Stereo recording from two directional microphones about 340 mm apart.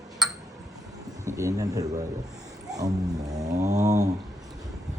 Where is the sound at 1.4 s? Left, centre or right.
Centre.